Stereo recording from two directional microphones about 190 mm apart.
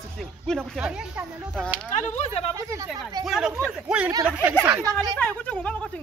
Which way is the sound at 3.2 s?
Centre (ahead or behind).